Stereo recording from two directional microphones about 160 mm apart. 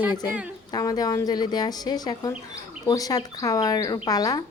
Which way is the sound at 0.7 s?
25° left (ahead or behind).